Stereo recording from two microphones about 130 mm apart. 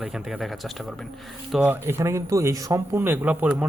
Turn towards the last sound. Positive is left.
turn(degrees=-10)  # may be behind; listen again after turning